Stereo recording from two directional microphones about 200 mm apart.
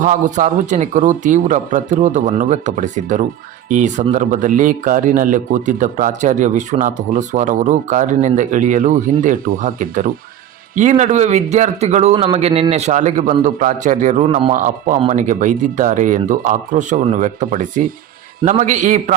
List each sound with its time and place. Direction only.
0.0 s a man's voice: 40° right (ahead or behind)
14.5 s a man's voice: 40° right (ahead or behind)